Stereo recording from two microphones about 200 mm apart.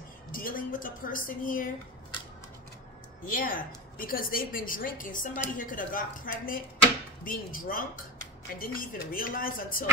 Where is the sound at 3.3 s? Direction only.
45° left (ahead or behind).